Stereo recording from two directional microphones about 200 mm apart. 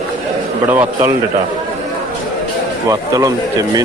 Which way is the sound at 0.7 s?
10° right (ahead or behind).